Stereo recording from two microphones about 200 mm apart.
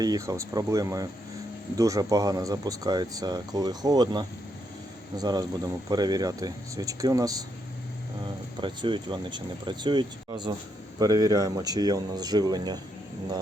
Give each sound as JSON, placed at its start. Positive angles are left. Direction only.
{"t": 0.0, "sound": "speech", "side_deg": -15}
{"t": 8.6, "sound": "speech", "side_deg": -25}